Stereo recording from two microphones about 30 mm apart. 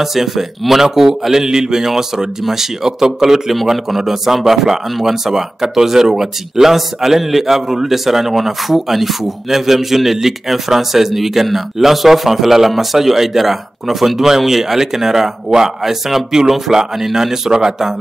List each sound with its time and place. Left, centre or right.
0.0 s a man's voice: centre